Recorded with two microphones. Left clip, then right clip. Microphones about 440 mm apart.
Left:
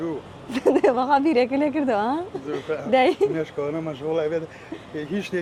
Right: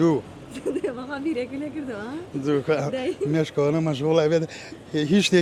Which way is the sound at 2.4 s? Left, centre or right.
Right.